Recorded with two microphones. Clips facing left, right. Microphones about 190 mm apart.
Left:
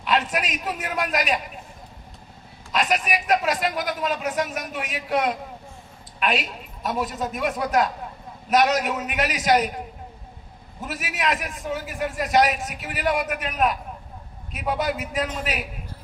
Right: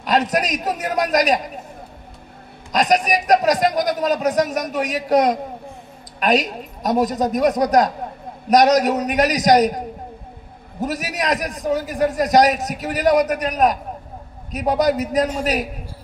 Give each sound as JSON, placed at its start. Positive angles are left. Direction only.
{"t": 0.0, "sound": "a man's voice", "side_deg": -40}
{"t": 2.7, "sound": "a man's voice", "side_deg": -40}